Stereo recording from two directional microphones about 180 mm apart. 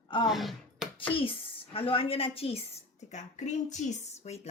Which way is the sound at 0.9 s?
30° left (ahead or behind).